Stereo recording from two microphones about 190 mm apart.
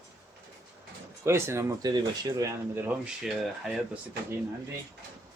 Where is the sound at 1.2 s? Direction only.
15° right (ahead or behind).